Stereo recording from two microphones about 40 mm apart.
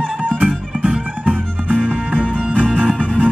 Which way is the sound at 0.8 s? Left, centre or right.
Right.